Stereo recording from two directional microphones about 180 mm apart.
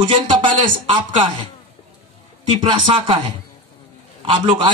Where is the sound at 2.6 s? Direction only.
25° right (ahead or behind).